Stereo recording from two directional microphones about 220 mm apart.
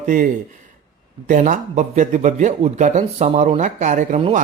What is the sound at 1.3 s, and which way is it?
Speech, 35° right (ahead or behind).